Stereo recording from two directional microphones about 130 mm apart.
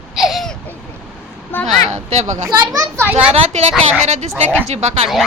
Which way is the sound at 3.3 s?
60° right (ahead or behind).